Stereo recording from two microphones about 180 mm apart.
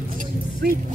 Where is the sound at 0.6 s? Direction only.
60° right (ahead or behind).